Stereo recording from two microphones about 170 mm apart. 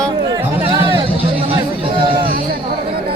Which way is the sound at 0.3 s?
30° right (ahead or behind).